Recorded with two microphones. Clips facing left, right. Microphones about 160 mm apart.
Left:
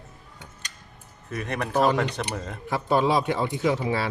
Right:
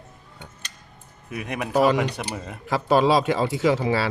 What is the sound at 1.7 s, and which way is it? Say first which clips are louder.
Speech: right 3 dB; 90° right.